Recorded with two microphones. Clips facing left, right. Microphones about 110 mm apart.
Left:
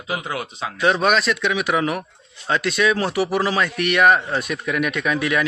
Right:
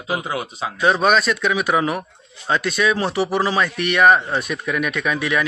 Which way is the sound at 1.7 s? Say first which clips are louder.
Right 2 dB; 30° right (ahead or behind).